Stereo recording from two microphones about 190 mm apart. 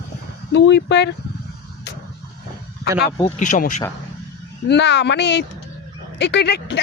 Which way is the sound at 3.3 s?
40° left (ahead or behind).